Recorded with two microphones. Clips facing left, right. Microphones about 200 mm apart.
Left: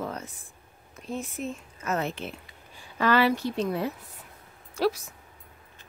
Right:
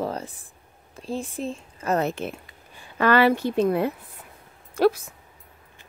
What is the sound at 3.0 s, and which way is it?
A woman's voice, 55° right (ahead or behind).